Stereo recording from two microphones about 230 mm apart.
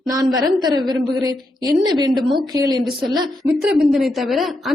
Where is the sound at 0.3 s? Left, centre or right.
Centre.